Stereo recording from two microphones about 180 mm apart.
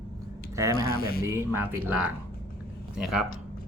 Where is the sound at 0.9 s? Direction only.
55° left (ahead or behind).